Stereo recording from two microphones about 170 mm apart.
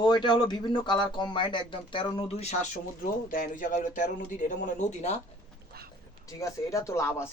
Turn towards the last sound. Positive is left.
turn(degrees=15)  # may be behind; listen again after turning